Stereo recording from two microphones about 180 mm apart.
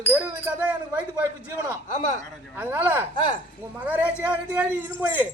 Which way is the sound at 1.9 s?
45° left (ahead or behind).